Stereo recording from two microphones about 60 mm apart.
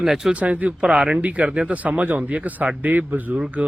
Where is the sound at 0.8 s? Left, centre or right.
Centre.